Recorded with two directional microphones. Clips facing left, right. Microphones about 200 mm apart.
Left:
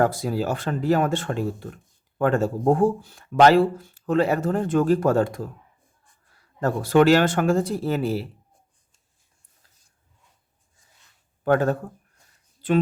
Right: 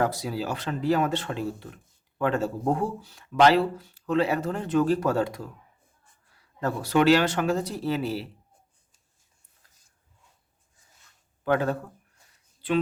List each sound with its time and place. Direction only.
0.0 s speech: 50° left (ahead or behind)
6.6 s speech: 50° left (ahead or behind)
11.4 s speech: 45° left (ahead or behind)